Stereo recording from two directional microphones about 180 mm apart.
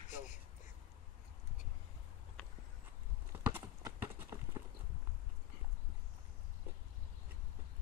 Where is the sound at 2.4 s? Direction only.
5° left (ahead or behind).